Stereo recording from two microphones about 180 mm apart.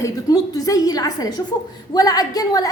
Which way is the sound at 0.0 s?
20° left (ahead or behind).